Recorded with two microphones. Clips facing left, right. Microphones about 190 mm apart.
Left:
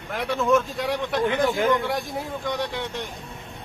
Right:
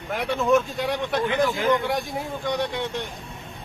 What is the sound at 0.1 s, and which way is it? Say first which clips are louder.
A man's voice: right 1 dB; centre (ahead or behind).